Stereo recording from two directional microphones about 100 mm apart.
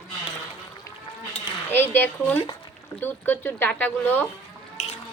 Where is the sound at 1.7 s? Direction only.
20° left (ahead or behind).